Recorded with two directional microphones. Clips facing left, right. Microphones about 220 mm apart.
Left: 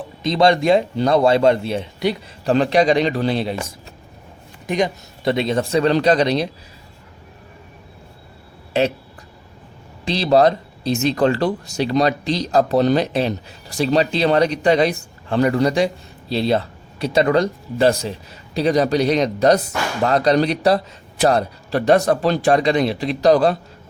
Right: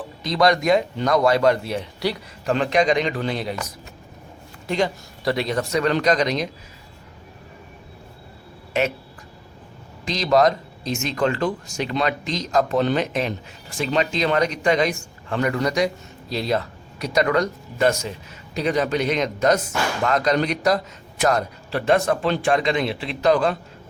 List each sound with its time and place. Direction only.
0.0 s speech: 25° left (ahead or behind)
2.5 s speech: 35° left (ahead or behind)
10.1 s speech: 30° left (ahead or behind)